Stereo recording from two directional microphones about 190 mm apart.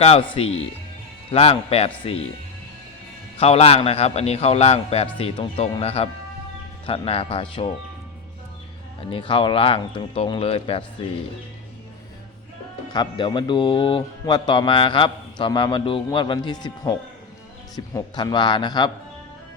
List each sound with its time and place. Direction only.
0.0 s a man's voice: 30° left (ahead or behind)
3.3 s a man's voice: 30° left (ahead or behind)
9.0 s speech: 25° left (ahead or behind)
12.9 s speech: 25° left (ahead or behind)